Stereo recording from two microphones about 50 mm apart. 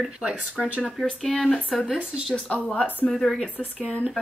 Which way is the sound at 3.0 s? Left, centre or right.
Centre.